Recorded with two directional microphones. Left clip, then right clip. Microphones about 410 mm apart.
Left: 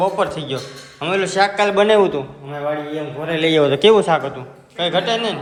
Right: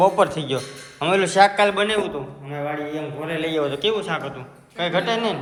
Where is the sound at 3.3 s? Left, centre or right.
Centre.